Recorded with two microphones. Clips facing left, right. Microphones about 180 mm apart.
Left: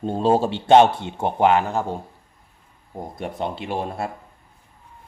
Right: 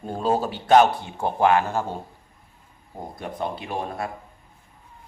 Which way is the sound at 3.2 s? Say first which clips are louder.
Left 2 dB; 25° left (ahead or behind).